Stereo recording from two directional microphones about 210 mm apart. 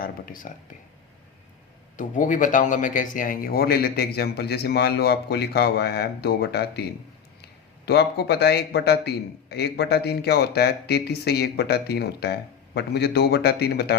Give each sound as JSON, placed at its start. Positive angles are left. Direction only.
{"t": 0.0, "sound": "speech", "side_deg": 40}
{"t": 2.0, "sound": "a man's voice", "side_deg": 40}
{"t": 7.9, "sound": "a man's voice", "side_deg": 50}